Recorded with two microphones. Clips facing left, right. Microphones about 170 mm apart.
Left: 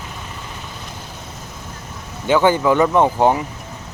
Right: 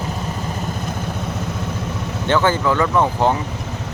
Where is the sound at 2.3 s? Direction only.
15° left (ahead or behind).